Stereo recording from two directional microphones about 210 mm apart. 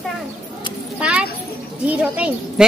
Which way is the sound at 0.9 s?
5° right (ahead or behind).